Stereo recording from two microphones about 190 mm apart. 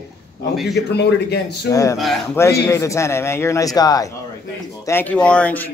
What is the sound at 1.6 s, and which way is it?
Speech, 15° left (ahead or behind).